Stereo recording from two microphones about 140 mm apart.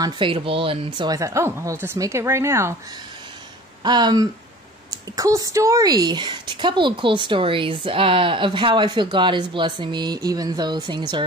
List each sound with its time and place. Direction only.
0.0 s speech: 40° right (ahead or behind); by 2.7 s 20° right (ahead or behind)
3.8 s speech: 30° right (ahead or behind)